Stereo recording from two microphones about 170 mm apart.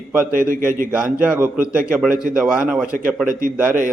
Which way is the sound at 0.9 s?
10° right (ahead or behind).